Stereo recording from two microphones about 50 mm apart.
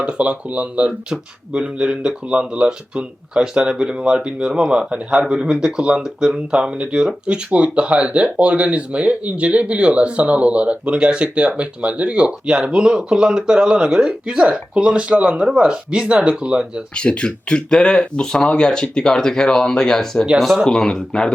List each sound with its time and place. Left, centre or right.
0.0 s speech: right
16.9 s speech: centre